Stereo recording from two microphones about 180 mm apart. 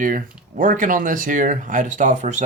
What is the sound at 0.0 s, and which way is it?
Speech, 50° right (ahead or behind).